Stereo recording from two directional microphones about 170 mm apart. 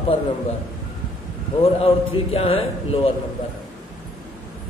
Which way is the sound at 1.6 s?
35° left (ahead or behind).